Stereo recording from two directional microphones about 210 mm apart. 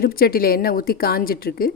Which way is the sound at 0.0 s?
45° left (ahead or behind).